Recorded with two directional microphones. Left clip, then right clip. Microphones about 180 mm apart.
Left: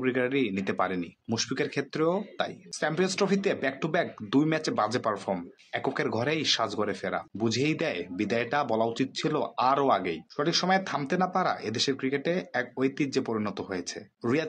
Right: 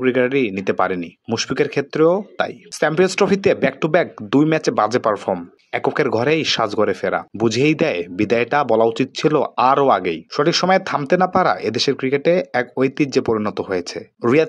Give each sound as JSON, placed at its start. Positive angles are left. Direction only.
{"t": 0.0, "sound": "speech", "side_deg": -35}